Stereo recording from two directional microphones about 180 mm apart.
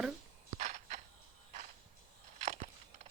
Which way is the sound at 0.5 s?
40° right (ahead or behind).